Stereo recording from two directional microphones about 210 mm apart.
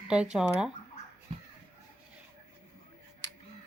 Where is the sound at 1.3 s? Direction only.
25° right (ahead or behind).